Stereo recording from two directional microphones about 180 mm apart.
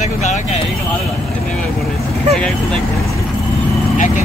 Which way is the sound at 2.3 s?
5° left (ahead or behind).